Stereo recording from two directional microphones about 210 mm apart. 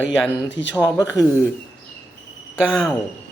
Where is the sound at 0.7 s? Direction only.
15° left (ahead or behind).